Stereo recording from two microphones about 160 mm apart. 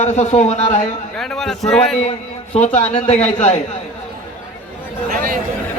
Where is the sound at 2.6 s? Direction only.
45° left (ahead or behind).